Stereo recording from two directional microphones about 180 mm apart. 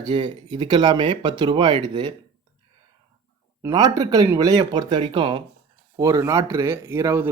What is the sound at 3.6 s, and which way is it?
Speech, 20° right (ahead or behind).